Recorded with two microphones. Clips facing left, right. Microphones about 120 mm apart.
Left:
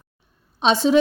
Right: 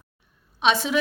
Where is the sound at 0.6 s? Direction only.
30° left (ahead or behind).